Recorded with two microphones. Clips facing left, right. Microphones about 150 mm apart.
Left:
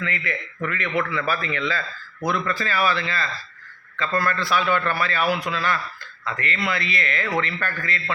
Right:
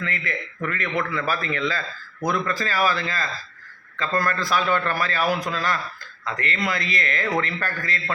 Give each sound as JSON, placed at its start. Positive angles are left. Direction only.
{"t": 0.0, "sound": "a man's voice", "side_deg": -40}